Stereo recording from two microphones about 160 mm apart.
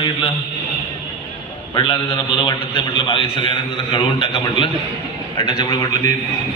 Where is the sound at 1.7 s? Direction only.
35° left (ahead or behind).